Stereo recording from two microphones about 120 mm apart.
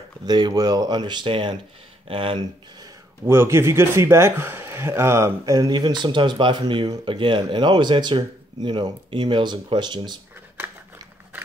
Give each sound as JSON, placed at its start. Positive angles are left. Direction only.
{"t": 0.3, "sound": "speech", "side_deg": -35}
{"t": 2.8, "sound": "speech", "side_deg": -25}